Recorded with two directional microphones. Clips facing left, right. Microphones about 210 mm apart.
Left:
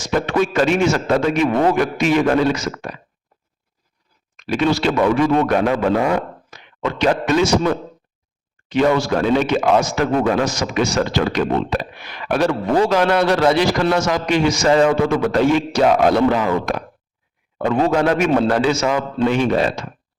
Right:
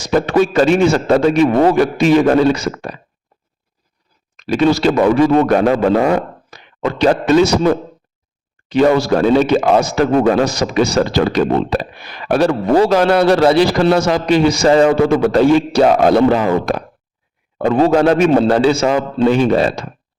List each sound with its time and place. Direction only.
0.0 s speech: 35° right (ahead or behind)
4.4 s speech: 35° right (ahead or behind)
8.7 s speech: 35° right (ahead or behind)